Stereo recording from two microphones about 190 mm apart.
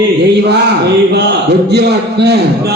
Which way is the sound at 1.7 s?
60° right (ahead or behind).